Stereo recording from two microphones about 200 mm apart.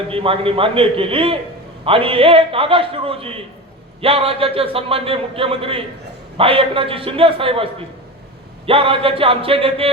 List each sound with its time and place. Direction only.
0.1 s speech: 25° right (ahead or behind)